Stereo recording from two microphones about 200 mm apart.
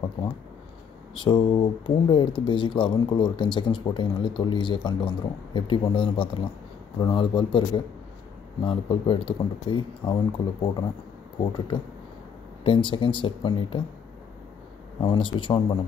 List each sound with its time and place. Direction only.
1.1 s speech: 25° left (ahead or behind)
15.0 s speech: 25° left (ahead or behind)